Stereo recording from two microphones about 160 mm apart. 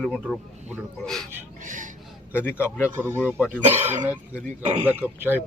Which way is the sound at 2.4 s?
15° left (ahead or behind).